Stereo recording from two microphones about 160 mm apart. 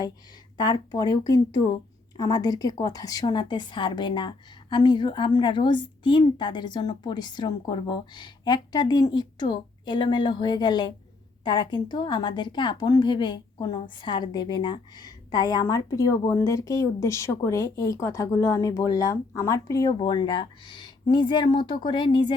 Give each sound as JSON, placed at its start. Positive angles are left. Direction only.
{"t": 0.5, "sound": "a woman's voice", "side_deg": 25}